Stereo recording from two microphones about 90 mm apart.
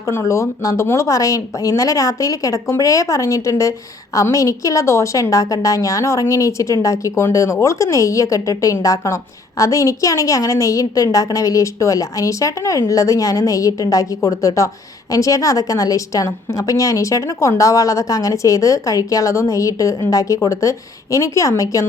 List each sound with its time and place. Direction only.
0.0 s speech: 35° left (ahead or behind)